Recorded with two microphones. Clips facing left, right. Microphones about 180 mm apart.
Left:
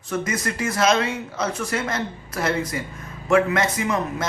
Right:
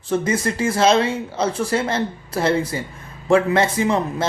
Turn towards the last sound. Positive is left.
turn(degrees=-30)  # may be behind; listen again after turning